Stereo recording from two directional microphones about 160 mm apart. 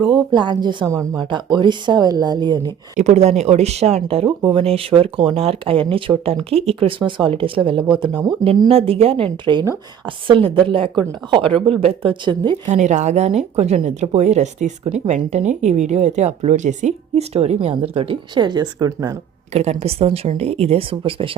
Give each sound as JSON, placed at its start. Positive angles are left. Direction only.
{"t": 0.0, "sound": "speech", "side_deg": -25}
{"t": 3.0, "sound": "speech", "side_deg": -45}
{"t": 12.6, "sound": "speech", "side_deg": -50}
{"t": 19.5, "sound": "speech", "side_deg": -40}